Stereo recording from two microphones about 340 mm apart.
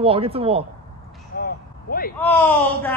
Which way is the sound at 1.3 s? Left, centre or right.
Left.